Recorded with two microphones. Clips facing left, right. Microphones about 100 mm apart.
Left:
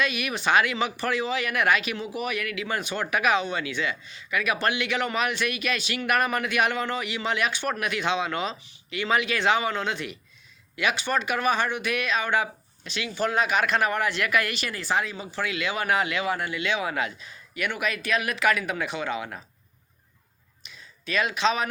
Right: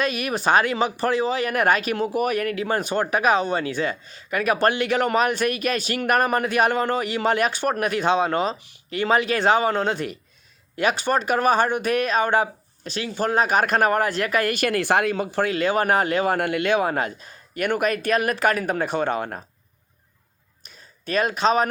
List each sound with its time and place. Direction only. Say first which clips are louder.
0.0 s speech: right 4 dB; 40° right (ahead or behind)
14.5 s speech: right 7 dB; 60° right (ahead or behind)
20.7 s speech: right 4 dB; 45° right (ahead or behind)